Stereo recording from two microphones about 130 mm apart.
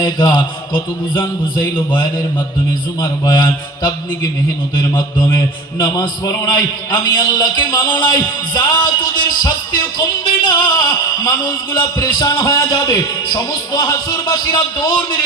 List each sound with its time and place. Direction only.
0.0 s a man's voice: 35° left (ahead or behind)
1.6 s a man's voice: 40° left (ahead or behind)